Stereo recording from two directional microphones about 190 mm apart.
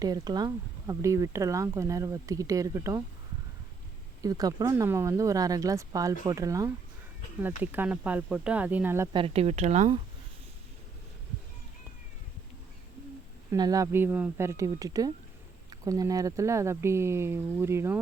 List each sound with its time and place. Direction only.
0.0 s speech: 20° right (ahead or behind)
4.2 s speech: 20° right (ahead or behind)
9.1 s speech: 30° right (ahead or behind)
13.5 s speech: 20° right (ahead or behind)